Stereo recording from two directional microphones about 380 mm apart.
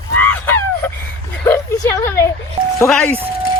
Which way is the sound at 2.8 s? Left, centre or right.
Centre.